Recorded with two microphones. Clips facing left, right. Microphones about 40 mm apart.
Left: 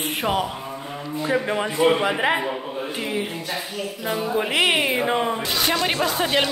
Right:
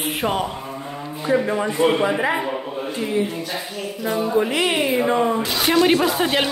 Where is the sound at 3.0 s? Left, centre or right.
Left.